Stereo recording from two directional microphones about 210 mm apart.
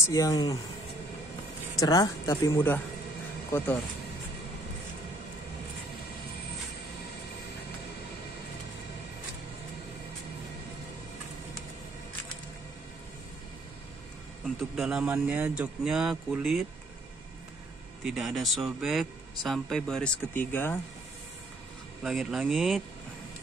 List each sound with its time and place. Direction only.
0.0 s speech: 15° left (ahead or behind)
1.8 s speech: 15° left (ahead or behind)
14.8 s a man's voice: 5° right (ahead or behind)
18.0 s a man's voice: centre (ahead or behind)
22.0 s a man's voice: centre (ahead or behind)